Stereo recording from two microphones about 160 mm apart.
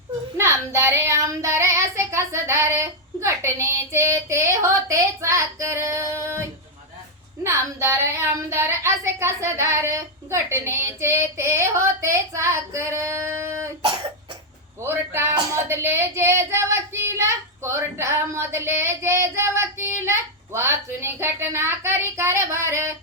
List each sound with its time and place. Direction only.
0.3 s child singing: 15° right (ahead or behind)
7.4 s speech: 15° right (ahead or behind)
14.8 s speech: 15° right (ahead or behind)